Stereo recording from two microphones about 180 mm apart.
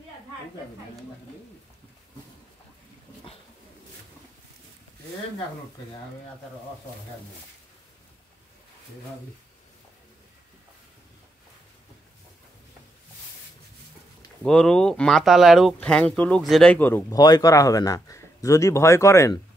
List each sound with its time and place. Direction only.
14.4 s speech: 5° left (ahead or behind)